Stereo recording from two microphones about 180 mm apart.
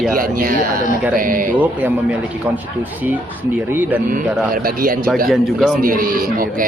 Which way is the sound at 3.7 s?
10° right (ahead or behind).